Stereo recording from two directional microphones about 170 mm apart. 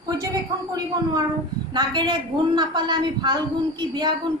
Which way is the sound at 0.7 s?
25° right (ahead or behind).